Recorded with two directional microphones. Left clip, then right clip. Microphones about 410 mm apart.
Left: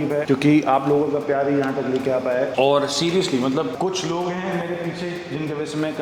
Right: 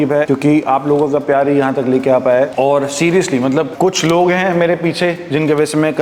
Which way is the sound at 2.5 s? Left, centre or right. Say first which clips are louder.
Right 5 dB; centre.